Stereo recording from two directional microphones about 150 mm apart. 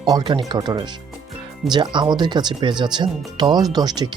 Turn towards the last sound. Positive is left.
turn(degrees=-30)  # may be behind; listen again after turning